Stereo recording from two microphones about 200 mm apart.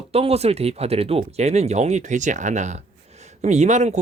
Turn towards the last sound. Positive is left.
turn(degrees=-35)  # may be behind; listen again after turning